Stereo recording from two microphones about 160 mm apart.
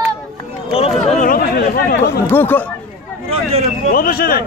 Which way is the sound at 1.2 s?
65° left (ahead or behind).